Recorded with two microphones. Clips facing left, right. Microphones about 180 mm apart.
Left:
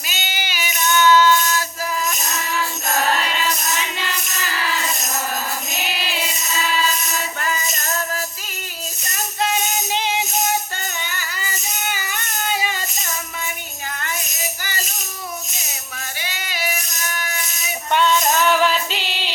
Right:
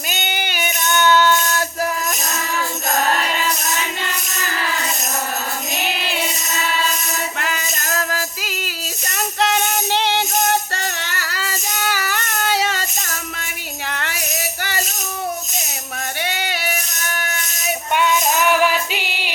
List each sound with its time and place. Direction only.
0.1 s female singing: 55° right (ahead or behind)
7.3 s music: 80° right
9.1 s music: 70° right (ahead or behind)
16.2 s female singing: 65° right (ahead or behind)
17.9 s music: 10° right (ahead or behind)